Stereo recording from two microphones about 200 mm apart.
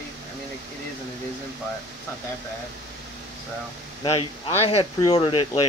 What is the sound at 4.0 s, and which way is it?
Speech, 25° left (ahead or behind).